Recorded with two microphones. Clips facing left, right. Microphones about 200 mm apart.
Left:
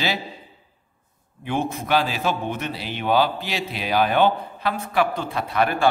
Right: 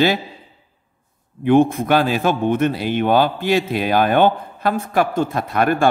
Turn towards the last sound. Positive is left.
turn(degrees=-50)  # may be behind; listen again after turning